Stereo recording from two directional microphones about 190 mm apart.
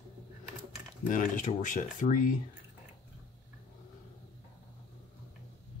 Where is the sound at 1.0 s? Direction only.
45° left (ahead or behind).